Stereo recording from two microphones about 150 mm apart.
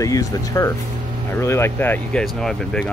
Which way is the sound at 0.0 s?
25° left (ahead or behind).